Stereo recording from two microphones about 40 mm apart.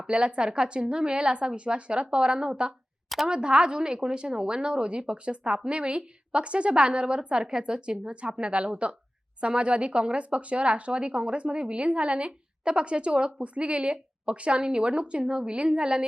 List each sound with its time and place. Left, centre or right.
0.1 s speech: right